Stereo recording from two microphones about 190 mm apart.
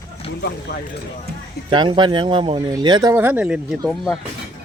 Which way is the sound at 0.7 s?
60° left (ahead or behind).